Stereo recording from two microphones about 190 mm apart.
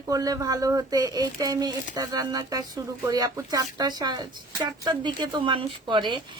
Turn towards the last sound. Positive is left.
turn(degrees=-25)  # may be behind; listen again after turning